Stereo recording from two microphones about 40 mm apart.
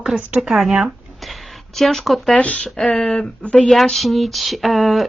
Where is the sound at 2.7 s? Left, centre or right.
Centre.